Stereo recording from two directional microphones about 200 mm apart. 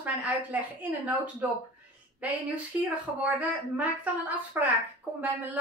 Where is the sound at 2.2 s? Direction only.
5° right (ahead or behind).